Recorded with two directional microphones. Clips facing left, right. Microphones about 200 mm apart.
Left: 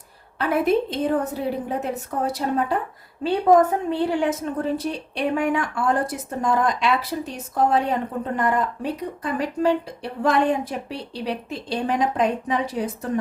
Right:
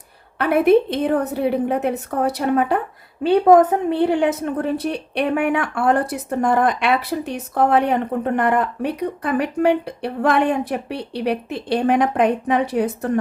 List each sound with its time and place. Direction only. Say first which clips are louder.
0.3 s a woman's voice: right 6 dB; 65° right (ahead or behind)